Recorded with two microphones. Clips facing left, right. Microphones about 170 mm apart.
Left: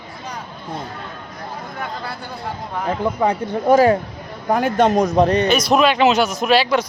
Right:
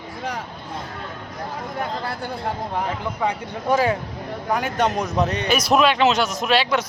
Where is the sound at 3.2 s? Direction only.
50° left (ahead or behind).